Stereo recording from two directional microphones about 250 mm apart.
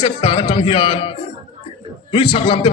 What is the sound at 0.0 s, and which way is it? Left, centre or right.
A man's voice, left.